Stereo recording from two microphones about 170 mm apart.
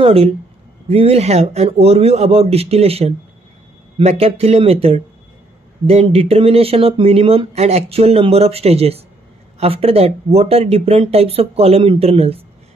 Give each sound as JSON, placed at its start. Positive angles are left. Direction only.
{"t": 0.0, "sound": "speech", "side_deg": -35}